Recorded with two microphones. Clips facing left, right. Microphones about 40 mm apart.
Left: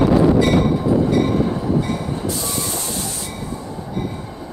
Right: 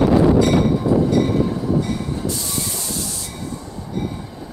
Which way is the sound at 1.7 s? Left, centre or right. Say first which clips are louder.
Left 1 dB; centre.